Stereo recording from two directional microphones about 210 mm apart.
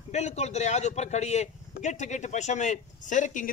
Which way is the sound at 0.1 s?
30° left (ahead or behind).